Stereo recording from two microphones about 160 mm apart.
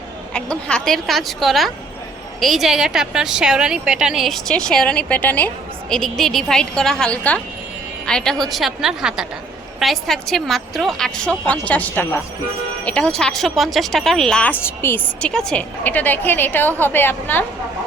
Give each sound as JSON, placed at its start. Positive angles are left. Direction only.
{"t": 0.3, "sound": "a woman's voice", "side_deg": 5}